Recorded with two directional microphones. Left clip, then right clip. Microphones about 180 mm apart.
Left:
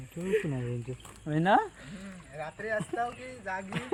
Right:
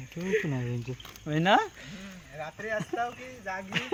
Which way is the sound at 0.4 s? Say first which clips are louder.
Right 2 dB; 90° right.